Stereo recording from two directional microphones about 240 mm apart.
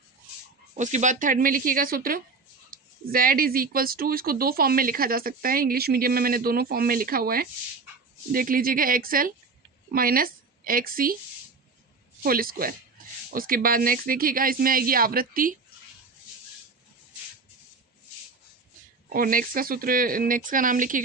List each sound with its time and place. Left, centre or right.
0.7 s a woman's voice: right
12.2 s speech: right
19.0 s speech: right